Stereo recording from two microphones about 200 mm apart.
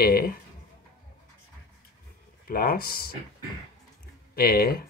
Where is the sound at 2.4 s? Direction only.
45° left (ahead or behind).